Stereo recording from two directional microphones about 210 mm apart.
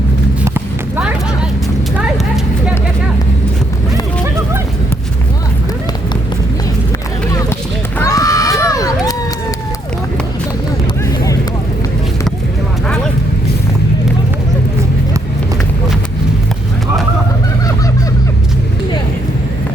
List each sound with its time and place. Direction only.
0.4 s run: 10° right (ahead or behind)
2.0 s a sound: 5° right (ahead or behind)
7.9 s run: 15° left (ahead or behind)
8.6 s crowd: 15° left (ahead or behind)